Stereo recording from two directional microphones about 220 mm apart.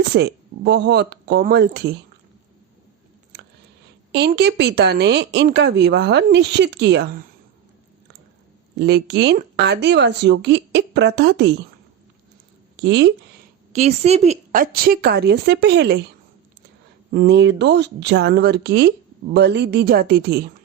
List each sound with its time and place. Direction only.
0.1 s speech: 50° right (ahead or behind)
4.1 s speech: 50° right (ahead or behind)
8.8 s speech: 50° right (ahead or behind)
12.7 s speech: 55° right (ahead or behind)
13.7 s speech: 30° right (ahead or behind); by 16.0 s 50° right (ahead or behind)
17.1 s speech: 45° right (ahead or behind)